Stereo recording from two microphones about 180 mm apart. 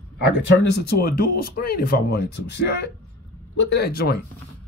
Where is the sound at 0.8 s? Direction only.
60° left (ahead or behind).